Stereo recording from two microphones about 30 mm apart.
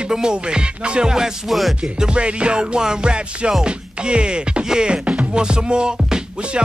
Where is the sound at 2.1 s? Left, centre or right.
Right.